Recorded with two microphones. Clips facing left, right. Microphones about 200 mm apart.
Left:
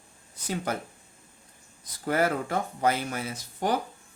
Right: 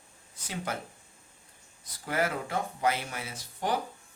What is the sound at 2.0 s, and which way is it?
Speech, 45° left (ahead or behind).